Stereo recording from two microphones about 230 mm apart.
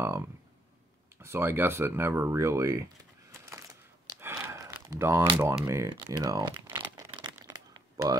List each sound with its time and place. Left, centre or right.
0.0 s speech: centre
3.3 s a sound: centre
5.7 s crumpling: centre